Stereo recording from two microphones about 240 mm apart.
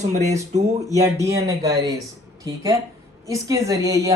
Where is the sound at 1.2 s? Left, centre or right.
Centre.